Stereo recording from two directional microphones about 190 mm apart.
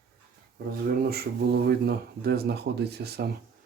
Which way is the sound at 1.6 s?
55° right (ahead or behind).